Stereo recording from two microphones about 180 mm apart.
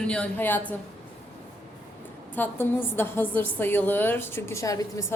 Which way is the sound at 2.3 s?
10° left (ahead or behind).